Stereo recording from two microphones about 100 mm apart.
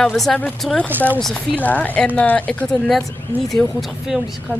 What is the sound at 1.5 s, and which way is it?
A woman's voice, 15° left (ahead or behind).